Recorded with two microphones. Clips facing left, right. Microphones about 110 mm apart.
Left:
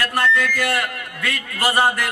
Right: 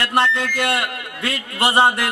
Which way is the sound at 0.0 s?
25° right (ahead or behind).